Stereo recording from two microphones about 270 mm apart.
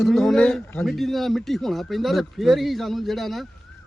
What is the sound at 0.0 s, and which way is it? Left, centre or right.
Speech, centre.